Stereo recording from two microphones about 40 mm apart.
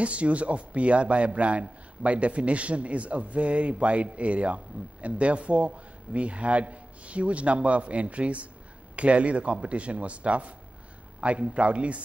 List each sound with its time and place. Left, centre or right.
0.0 s a man's voice: right